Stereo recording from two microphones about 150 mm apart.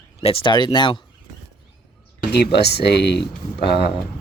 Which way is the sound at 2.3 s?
90° left.